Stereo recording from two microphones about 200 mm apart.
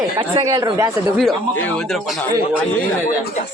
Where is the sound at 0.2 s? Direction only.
25° right (ahead or behind).